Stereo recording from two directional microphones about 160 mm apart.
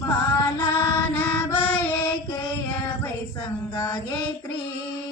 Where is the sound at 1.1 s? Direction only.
10° left (ahead or behind).